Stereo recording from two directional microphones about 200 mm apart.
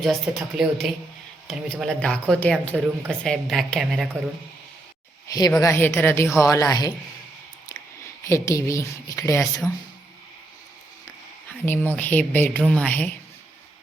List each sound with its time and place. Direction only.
0.0 s a woman's voice: centre (ahead or behind)
5.3 s a woman's voice: 15° left (ahead or behind)
8.2 s a woman's voice: 15° left (ahead or behind)
11.6 s a woman's voice: 10° left (ahead or behind)